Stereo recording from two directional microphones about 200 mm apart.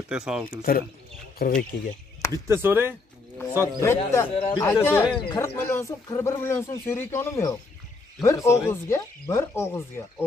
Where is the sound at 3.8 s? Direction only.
15° left (ahead or behind).